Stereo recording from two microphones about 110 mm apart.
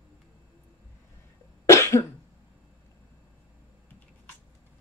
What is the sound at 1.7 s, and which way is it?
Cough, 25° left (ahead or behind).